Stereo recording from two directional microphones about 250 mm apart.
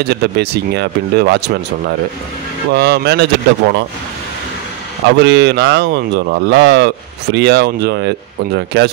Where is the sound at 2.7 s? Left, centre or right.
Right.